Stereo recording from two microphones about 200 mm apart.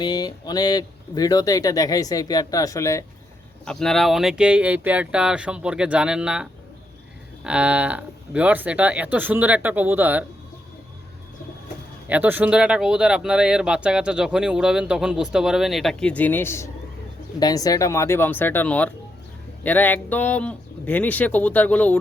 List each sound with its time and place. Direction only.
0.0 s speech: 20° left (ahead or behind)
3.7 s speech: 5° left (ahead or behind)
12.0 s speech: 10° right (ahead or behind); by 21.9 s 5° left (ahead or behind)